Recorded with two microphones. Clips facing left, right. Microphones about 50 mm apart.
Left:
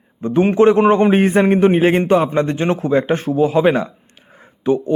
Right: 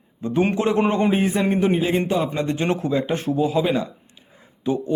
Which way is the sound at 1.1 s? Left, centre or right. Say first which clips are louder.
Left 7 dB; left.